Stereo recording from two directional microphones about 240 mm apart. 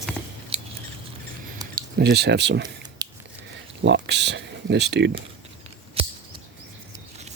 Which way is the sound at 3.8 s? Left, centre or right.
Right.